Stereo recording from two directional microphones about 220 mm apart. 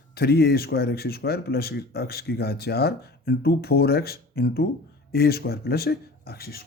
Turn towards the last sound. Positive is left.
turn(degrees=45)  # may be behind; listen again after turning